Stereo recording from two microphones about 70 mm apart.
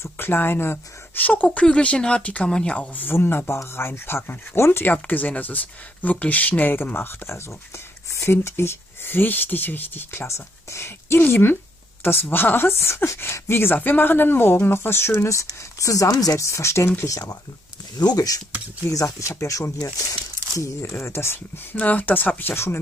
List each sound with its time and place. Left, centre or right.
0.0 s speech: left; by 3.0 s centre
3.0 s speech: left
4.9 s speech: left
15.8 s speech: left
17.9 s speech: left
20.9 s speech: left
21.7 s speech: left